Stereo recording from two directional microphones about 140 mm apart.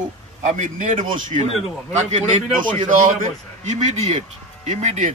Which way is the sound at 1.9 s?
55° right (ahead or behind).